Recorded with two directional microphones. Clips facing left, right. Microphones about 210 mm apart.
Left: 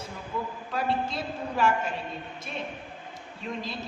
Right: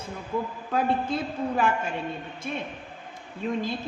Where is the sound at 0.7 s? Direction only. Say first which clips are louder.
Right 4 dB; 50° right (ahead or behind).